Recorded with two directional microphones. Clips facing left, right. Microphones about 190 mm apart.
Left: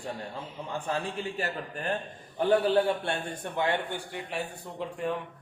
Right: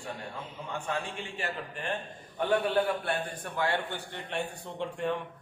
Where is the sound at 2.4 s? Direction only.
30° left (ahead or behind).